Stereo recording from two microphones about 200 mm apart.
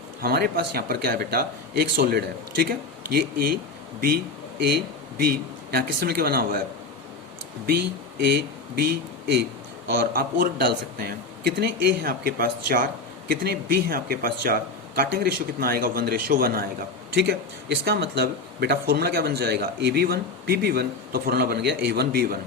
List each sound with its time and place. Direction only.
0.2 s speech: 50° right (ahead or behind)
4.6 s speech: 50° right (ahead or behind)
8.2 s speech: 50° right (ahead or behind)
9.9 s speech: 50° right (ahead or behind)